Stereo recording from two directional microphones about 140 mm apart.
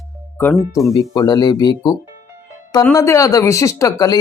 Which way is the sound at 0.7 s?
25° left (ahead or behind).